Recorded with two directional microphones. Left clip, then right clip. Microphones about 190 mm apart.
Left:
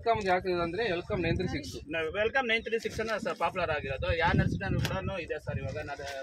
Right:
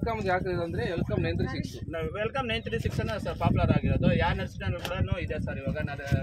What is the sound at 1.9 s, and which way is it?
Speech, 40° left (ahead or behind).